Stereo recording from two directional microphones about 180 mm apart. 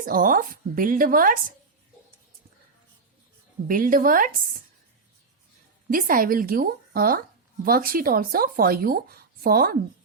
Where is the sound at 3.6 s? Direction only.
50° right (ahead or behind).